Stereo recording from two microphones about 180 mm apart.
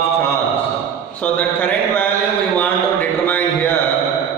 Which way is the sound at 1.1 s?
10° left (ahead or behind).